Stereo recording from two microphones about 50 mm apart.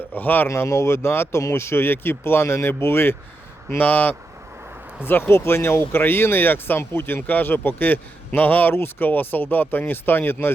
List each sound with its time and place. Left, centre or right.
0.2 s speech: left
0.4 s speech: left
3.8 s speech: left